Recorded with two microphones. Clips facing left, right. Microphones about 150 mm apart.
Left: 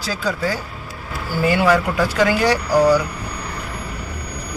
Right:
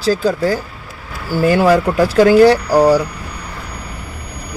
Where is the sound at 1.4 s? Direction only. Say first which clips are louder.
Right 4 dB; 35° right (ahead or behind).